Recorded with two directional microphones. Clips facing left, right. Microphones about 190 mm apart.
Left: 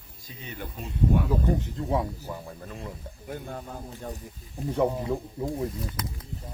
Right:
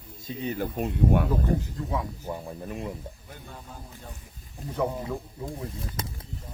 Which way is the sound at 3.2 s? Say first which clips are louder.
Left 9 dB; 50° left (ahead or behind).